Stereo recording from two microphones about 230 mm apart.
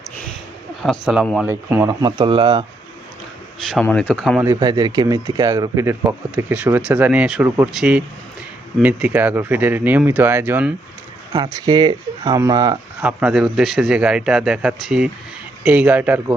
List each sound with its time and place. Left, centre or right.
0.8 s speech: centre
1.5 s speech: centre
3.7 s speech: centre
13.0 s speech: centre